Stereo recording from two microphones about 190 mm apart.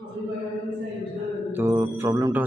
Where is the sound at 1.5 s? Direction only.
10° right (ahead or behind).